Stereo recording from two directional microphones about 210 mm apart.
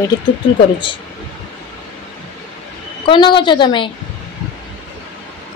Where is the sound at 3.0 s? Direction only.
25° left (ahead or behind).